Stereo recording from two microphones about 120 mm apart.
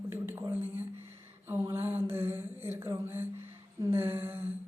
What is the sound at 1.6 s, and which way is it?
Speech, 20° right (ahead or behind).